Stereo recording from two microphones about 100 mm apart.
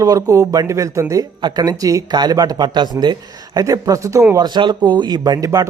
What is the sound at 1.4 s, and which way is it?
Speech, 45° right (ahead or behind).